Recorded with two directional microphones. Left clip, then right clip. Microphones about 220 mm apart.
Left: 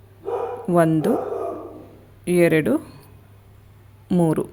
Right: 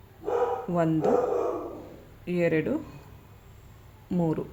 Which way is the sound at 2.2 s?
50° left (ahead or behind).